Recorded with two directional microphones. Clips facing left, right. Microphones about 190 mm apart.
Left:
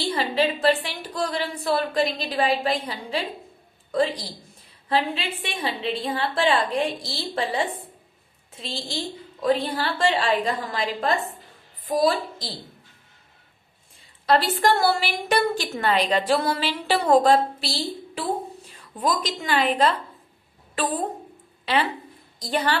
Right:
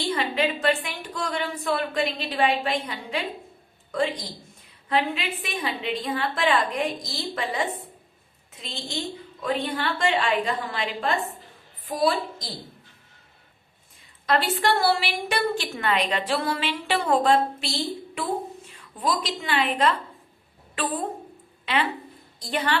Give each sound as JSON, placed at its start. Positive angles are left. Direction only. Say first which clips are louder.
{"t": 0.0, "sound": "a woman's voice", "louder": "left 2 dB", "side_deg": 35}
{"t": 4.9, "sound": "a woman's voice", "louder": "left 1 dB", "side_deg": 30}
{"t": 14.3, "sound": "a woman's voice", "louder": "left 3 dB", "side_deg": 35}
{"t": 19.0, "sound": "a woman's voice", "louder": "left 2 dB", "side_deg": 45}
{"t": 22.4, "sound": "a woman's voice", "louder": "left 2 dB", "side_deg": 40}